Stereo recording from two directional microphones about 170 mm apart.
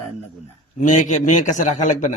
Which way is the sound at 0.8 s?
45° left (ahead or behind).